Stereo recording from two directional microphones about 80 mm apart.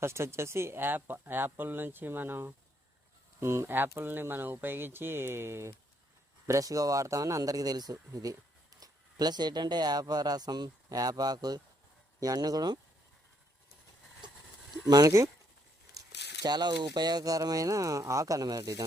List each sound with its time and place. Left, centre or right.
0.0 s speech: right
6.5 s speech: right
14.2 s horse: right
14.8 s speech: right